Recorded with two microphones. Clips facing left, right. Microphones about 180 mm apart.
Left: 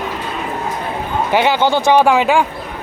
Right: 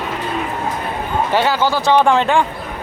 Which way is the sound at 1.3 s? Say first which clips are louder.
Left 3 dB; 20° left (ahead or behind).